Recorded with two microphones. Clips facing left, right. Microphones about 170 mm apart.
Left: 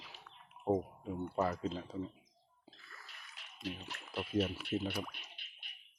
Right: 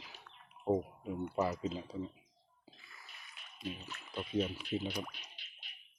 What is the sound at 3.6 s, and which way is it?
Speech, 90° left.